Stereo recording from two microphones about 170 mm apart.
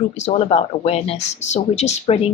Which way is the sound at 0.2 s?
35° left (ahead or behind).